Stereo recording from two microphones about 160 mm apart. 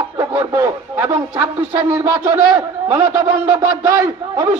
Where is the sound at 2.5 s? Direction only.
25° right (ahead or behind).